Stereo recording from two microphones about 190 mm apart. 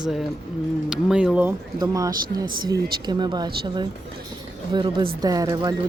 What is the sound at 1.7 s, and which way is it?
Speech, 15° right (ahead or behind).